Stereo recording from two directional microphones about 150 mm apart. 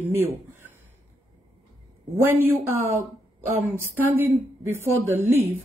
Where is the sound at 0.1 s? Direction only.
15° right (ahead or behind).